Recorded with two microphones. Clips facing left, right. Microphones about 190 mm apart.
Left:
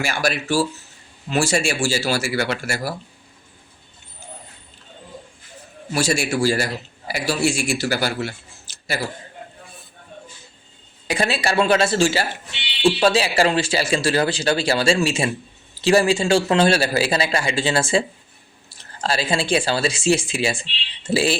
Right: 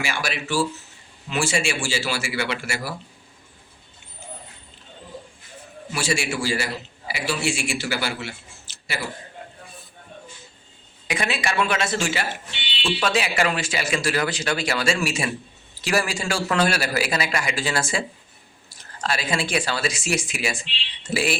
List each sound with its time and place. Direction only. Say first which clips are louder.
0.0 s speech: left 5 dB; 40° left (ahead or behind)
5.9 s speech: left 5 dB; 40° left (ahead or behind)
11.1 s a man's voice: left 4 dB; 35° left (ahead or behind)